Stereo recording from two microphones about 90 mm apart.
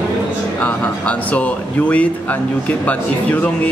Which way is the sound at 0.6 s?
15° left (ahead or behind).